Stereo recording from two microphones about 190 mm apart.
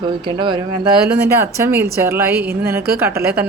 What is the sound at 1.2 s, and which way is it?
Speech, 15° right (ahead or behind).